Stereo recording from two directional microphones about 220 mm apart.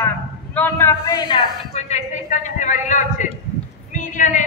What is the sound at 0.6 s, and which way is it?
A man's voice, 10° left (ahead or behind).